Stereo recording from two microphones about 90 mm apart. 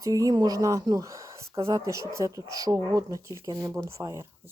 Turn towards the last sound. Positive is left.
turn(degrees=-35)  # may be behind; listen again after turning